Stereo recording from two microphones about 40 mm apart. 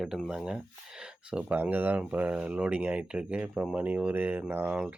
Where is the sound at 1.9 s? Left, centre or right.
Right.